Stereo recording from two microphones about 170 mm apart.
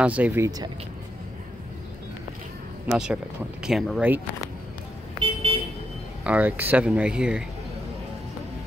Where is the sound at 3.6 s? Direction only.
5° right (ahead or behind).